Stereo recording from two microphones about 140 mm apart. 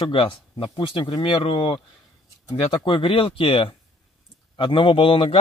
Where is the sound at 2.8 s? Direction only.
35° left (ahead or behind).